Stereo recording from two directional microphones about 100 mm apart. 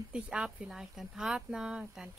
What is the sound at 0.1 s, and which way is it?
Speech, 10° right (ahead or behind).